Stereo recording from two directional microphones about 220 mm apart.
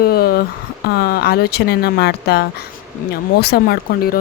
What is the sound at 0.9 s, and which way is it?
Speech, 45° left (ahead or behind).